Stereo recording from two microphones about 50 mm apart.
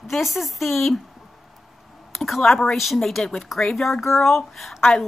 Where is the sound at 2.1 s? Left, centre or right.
Centre.